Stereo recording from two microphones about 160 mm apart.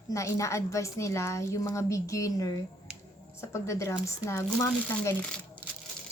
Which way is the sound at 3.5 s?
20° left (ahead or behind).